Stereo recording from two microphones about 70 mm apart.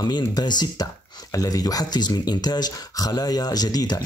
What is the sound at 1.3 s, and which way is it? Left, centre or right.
Speech, left.